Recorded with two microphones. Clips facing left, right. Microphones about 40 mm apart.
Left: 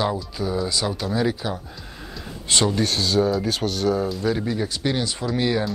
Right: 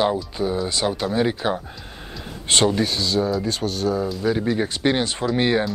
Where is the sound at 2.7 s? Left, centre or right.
Centre.